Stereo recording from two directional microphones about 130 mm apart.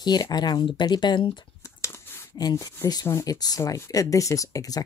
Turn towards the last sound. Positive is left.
turn(degrees=25)  # may be behind; listen again after turning